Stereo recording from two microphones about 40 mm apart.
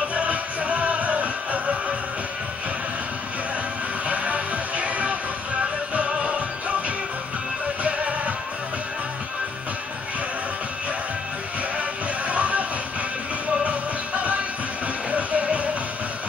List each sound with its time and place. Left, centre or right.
0.1 s music: right
4.1 s music: right
12.3 s music: right
13.7 s music: right